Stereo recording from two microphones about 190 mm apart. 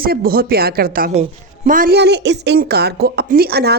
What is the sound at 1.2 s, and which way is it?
A woman's voice, 40° right (ahead or behind).